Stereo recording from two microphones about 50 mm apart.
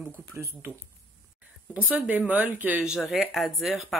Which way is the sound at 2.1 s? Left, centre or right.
Right.